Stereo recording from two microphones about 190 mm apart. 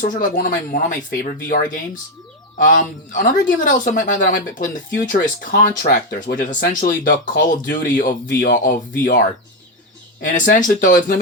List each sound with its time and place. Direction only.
0.0 s speech: 45° left (ahead or behind)